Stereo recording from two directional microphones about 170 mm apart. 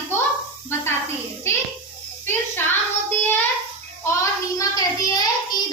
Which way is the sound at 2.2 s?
10° left (ahead or behind).